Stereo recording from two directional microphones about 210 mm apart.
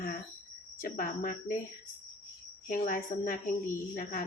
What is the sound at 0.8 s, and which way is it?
Jingle bell, 40° left (ahead or behind).